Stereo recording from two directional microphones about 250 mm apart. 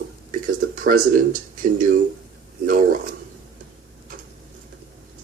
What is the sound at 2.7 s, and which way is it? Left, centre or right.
Mechanisms, right.